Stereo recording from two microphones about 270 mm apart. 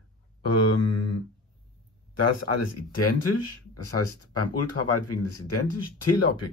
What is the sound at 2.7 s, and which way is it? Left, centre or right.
Speech, left.